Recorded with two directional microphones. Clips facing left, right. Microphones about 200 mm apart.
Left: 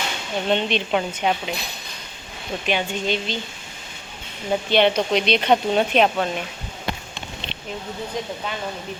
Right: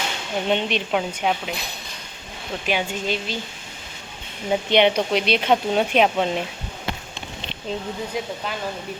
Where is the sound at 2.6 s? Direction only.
5° right (ahead or behind).